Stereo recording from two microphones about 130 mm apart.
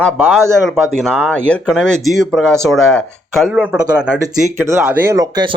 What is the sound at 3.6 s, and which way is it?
Speech, 10° right (ahead or behind).